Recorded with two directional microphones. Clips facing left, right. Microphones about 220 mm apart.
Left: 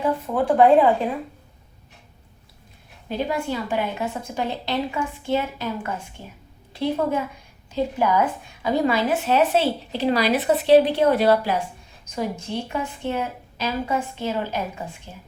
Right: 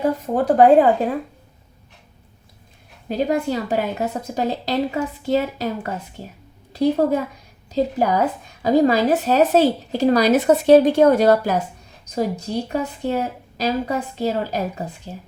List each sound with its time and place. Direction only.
0.0 s speech: 40° right (ahead or behind)
3.1 s a woman's voice: 40° right (ahead or behind)